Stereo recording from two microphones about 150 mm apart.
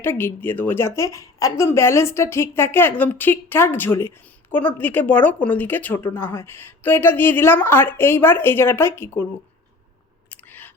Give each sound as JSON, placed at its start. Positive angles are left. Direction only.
{"t": 0.0, "sound": "a woman's voice", "side_deg": 15}
{"t": 10.2, "sound": "chewing", "side_deg": 10}